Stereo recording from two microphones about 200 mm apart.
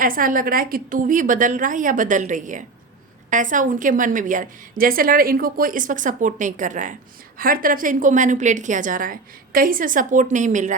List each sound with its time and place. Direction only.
0.0 s a woman's voice: 45° right (ahead or behind)